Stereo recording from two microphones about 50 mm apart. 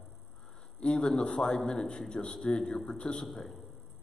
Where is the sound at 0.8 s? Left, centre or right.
Centre.